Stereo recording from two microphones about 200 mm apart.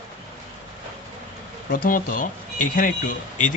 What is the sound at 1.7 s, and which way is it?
Speech, 45° left (ahead or behind).